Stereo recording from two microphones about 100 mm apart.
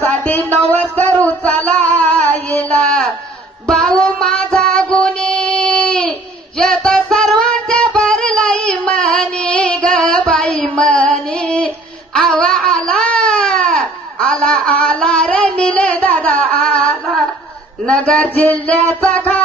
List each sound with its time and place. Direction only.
0.6 s music: 15° left (ahead or behind)
1.2 s female singing: 15° left (ahead or behind)
3.6 s music: 5° left (ahead or behind)
16.6 s a sound: 10° left (ahead or behind)
17.8 s music: 10° left (ahead or behind)